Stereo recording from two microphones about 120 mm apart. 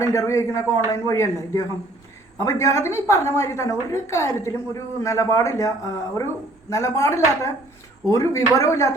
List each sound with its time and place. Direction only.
0.0 s a woman's voice: 25° left (ahead or behind)